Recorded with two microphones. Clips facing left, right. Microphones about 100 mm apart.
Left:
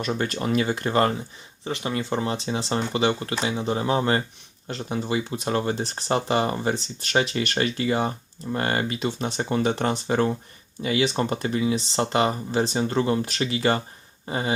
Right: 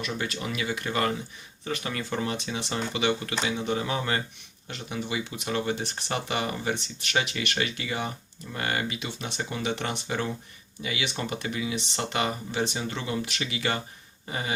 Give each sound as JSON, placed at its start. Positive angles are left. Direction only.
{"t": 0.0, "sound": "speech", "side_deg": 45}
{"t": 1.6, "sound": "speech", "side_deg": 25}